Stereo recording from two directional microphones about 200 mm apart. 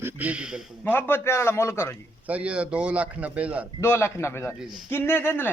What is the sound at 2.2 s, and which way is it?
Speech, 5° right (ahead or behind).